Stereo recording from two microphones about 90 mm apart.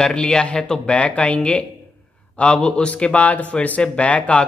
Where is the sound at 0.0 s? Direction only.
10° left (ahead or behind).